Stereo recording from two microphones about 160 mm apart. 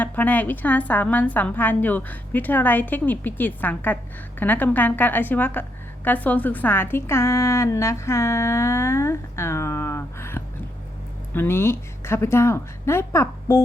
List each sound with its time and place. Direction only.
0.0 s a woman's voice: 10° left (ahead or behind)